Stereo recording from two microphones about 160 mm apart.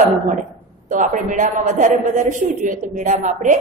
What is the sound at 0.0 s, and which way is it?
A man's voice, 50° right (ahead or behind).